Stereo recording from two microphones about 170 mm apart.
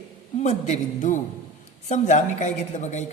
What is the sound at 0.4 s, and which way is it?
A woman's voice, 45° left (ahead or behind).